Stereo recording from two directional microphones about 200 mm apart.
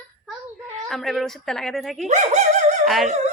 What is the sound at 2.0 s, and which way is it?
Speech, 35° right (ahead or behind).